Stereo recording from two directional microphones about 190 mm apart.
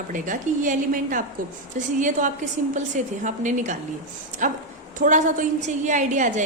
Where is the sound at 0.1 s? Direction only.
45° right (ahead or behind).